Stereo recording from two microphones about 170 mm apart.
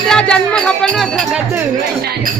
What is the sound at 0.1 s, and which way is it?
Speech, 5° left (ahead or behind).